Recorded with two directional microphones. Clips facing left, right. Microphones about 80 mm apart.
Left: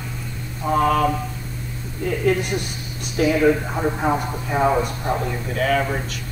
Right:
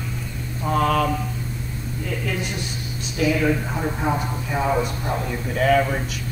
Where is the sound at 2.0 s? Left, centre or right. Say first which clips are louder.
Left 8 dB; left.